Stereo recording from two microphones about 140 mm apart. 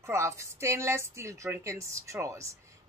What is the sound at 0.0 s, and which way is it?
A woman's voice, 20° right (ahead or behind).